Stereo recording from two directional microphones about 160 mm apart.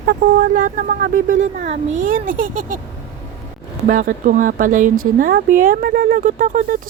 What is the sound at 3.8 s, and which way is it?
Speech, 60° right (ahead or behind).